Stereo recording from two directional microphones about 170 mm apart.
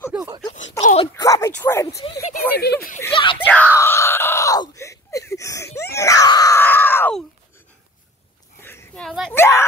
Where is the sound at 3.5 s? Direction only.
10° left (ahead or behind).